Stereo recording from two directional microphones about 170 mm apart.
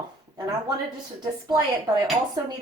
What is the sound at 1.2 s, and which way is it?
Speech, 25° right (ahead or behind).